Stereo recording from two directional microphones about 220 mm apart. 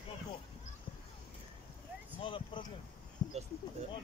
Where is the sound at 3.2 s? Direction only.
20° left (ahead or behind).